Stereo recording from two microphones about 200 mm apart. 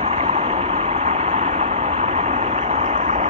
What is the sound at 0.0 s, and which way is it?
Vehicle, 30° right (ahead or behind).